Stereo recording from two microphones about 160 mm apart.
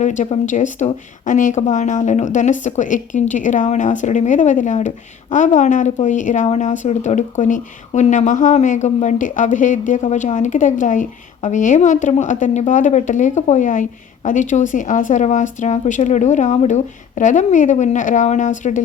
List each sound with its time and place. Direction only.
0.0 s speech: 50° left (ahead or behind)